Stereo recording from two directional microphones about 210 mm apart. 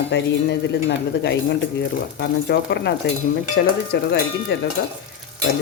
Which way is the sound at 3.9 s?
55° left (ahead or behind).